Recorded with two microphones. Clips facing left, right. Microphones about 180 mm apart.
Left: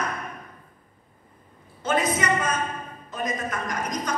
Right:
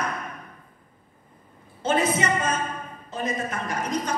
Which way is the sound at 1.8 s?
30° right (ahead or behind).